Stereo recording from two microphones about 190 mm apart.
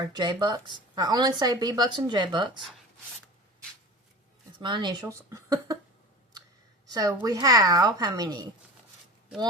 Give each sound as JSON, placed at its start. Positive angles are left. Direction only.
{"t": 0.0, "sound": "speech", "side_deg": -20}
{"t": 4.6, "sound": "speech", "side_deg": -25}
{"t": 6.8, "sound": "speech", "side_deg": -20}